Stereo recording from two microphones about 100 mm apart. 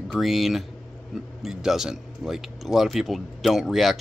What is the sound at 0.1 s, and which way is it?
Speech, centre (ahead or behind).